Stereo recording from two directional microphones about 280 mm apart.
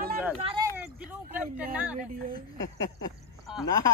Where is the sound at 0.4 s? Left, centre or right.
Centre.